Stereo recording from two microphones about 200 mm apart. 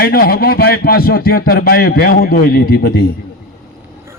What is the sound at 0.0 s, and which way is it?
A man's voice, 50° left (ahead or behind).